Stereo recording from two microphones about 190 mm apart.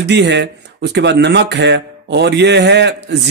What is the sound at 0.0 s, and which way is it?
Speech, 65° right (ahead or behind).